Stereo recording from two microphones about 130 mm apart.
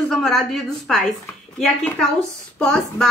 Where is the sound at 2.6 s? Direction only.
5° left (ahead or behind).